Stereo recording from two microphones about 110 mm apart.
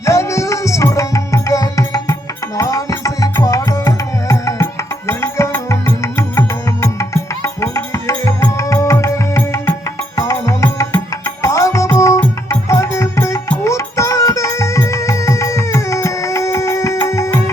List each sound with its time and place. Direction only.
0.0 s music: 25° left (ahead or behind)